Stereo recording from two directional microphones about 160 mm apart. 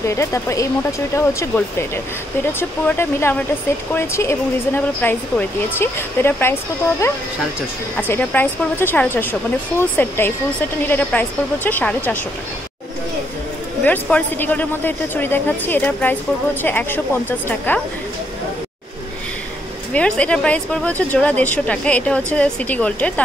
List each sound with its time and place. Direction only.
0.0 s speech: 15° left (ahead or behind)
2.9 s speech: 15° left (ahead or behind)
13.8 s speech: 10° left (ahead or behind)
19.9 s speech: 10° left (ahead or behind)